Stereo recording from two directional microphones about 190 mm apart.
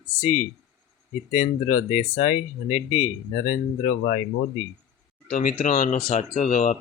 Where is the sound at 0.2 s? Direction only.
40° left (ahead or behind).